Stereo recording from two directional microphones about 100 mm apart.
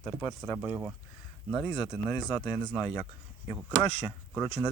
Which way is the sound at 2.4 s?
10° left (ahead or behind).